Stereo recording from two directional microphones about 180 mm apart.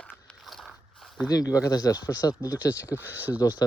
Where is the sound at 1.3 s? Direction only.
20° left (ahead or behind).